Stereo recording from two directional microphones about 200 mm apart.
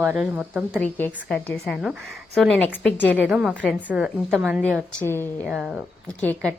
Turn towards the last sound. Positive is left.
turn(degrees=10)  # may be behind; listen again after turning